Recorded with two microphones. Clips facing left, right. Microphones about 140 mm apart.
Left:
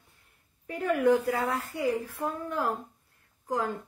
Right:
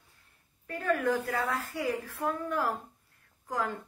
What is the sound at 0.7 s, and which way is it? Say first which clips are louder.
A woman's voice: left 5 dB; 20° left (ahead or behind).